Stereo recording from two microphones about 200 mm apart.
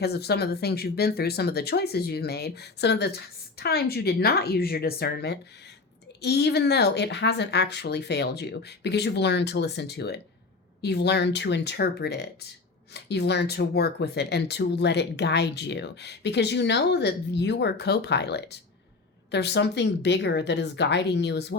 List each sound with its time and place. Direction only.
0.0 s speech: 55° left (ahead or behind)